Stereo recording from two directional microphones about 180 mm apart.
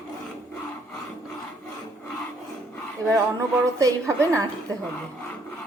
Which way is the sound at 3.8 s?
20° right (ahead or behind).